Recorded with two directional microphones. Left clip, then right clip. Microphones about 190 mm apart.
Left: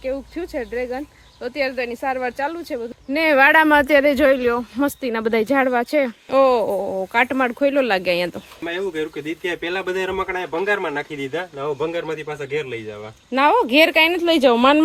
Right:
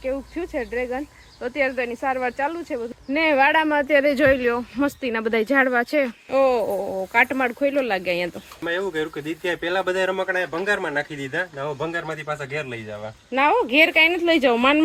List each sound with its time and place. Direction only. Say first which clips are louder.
0.0 s speech: left 1 dB; 10° left (ahead or behind)
3.2 s speech: left 5 dB; 55° left (ahead or behind)
3.9 s speech: left 3 dB; 40° left (ahead or behind)
4.2 s speech: left 2 dB; 25° left (ahead or behind)
9.4 s speech: right 2 dB; 5° left (ahead or behind)
13.3 s speech: left 3 dB; 30° left (ahead or behind)